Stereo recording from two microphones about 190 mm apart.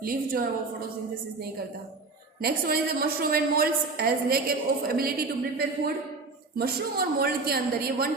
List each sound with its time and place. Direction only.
0.0 s a woman's voice: 50° right (ahead or behind)
2.4 s a woman's voice: 55° right (ahead or behind)